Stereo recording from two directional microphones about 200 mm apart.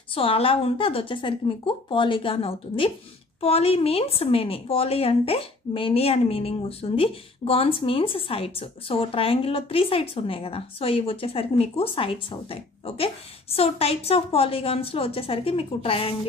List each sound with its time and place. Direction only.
0.1 s a woman's voice: 25° left (ahead or behind)